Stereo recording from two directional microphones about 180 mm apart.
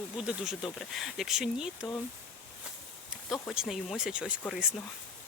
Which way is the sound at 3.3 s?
Centre (ahead or behind).